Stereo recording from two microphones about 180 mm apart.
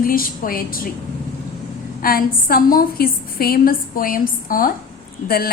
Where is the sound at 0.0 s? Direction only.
50° left (ahead or behind).